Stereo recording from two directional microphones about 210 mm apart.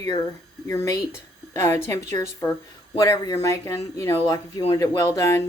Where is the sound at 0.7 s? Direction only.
15° left (ahead or behind).